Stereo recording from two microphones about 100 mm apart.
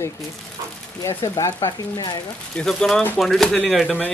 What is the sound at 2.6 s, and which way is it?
Speech, 5° left (ahead or behind).